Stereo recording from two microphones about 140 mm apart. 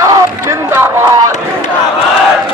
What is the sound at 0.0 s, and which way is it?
Run, 20° right (ahead or behind).